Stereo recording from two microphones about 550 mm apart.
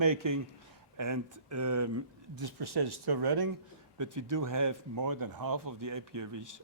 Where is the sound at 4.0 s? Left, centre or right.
Right.